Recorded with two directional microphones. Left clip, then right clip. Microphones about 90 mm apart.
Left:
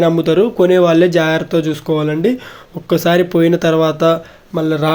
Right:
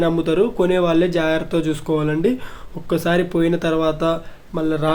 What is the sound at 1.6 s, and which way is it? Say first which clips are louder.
Speech: left 4 dB; 25° left (ahead or behind).